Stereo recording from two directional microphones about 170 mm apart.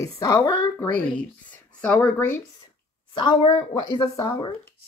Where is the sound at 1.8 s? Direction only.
10° left (ahead or behind).